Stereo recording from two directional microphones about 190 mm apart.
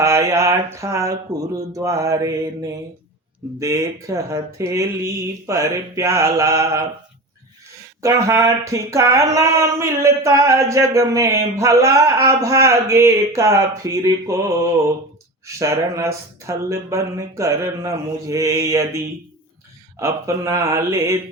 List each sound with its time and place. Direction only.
0.0 s speech: 15° right (ahead or behind)
8.0 s speech: 15° right (ahead or behind)
20.0 s speech: 15° right (ahead or behind)